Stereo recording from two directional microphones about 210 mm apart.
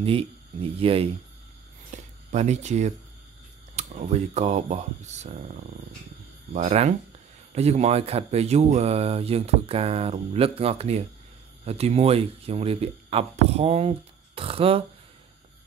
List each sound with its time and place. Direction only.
0.0 s speech: 25° right (ahead or behind)
1.9 s a sound: 35° right (ahead or behind)
3.7 s speech: 35° right (ahead or behind)
6.5 s speech: 35° right (ahead or behind)